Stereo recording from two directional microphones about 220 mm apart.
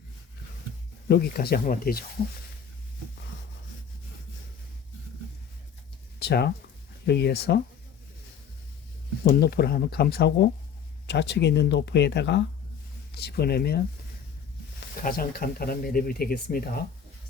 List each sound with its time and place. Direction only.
1.0 s speech: 45° left (ahead or behind)
6.1 s speech: 50° left (ahead or behind)
9.4 s speech: 45° left (ahead or behind)
15.0 s speech: 40° left (ahead or behind)